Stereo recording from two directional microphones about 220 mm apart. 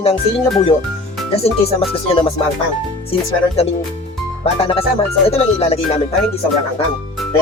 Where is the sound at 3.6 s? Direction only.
25° left (ahead or behind).